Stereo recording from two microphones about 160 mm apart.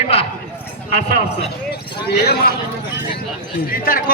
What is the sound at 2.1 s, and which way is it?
Speech, 85° left.